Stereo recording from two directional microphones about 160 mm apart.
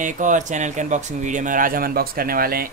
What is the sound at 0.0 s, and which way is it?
Speech, 50° right (ahead or behind).